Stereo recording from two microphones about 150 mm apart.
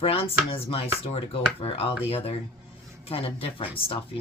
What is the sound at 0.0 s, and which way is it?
Speech, 40° left (ahead or behind).